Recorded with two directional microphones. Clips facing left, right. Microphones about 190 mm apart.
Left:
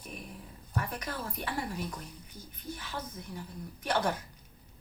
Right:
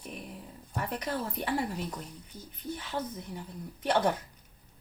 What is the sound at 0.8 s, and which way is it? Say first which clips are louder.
Speech: right 2 dB; 25° right (ahead or behind).